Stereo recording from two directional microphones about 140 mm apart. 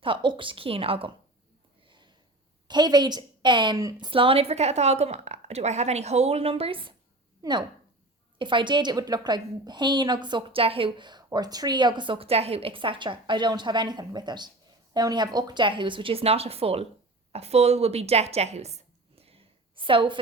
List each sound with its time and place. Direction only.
0.0 s a woman's voice: 35° right (ahead or behind)
1.9 s a sound: 35° right (ahead or behind)
2.6 s a woman's voice: 30° right (ahead or behind)
4.0 s a woman's voice: 40° right (ahead or behind)
7.4 s speech: 25° right (ahead or behind)
8.4 s a woman's voice: 35° right (ahead or behind)